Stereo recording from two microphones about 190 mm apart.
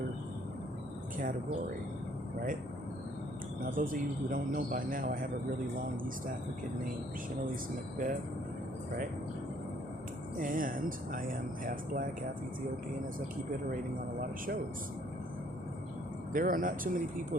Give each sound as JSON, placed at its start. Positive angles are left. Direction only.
{"t": 3.8, "sound": "speech", "side_deg": -45}
{"t": 7.5, "sound": "speech", "side_deg": -45}
{"t": 10.4, "sound": "speech", "side_deg": -45}
{"t": 14.2, "sound": "speech", "side_deg": -45}
{"t": 16.3, "sound": "speech", "side_deg": -45}